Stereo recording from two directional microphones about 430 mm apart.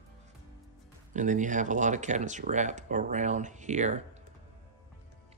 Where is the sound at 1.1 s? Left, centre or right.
Centre.